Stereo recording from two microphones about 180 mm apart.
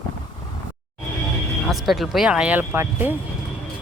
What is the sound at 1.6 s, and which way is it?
Speech, centre (ahead or behind).